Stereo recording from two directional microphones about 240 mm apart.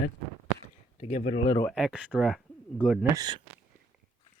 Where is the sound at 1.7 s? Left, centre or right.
Centre.